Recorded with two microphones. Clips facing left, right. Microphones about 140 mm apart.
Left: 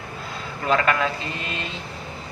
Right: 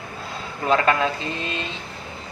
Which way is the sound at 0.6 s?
30° right (ahead or behind).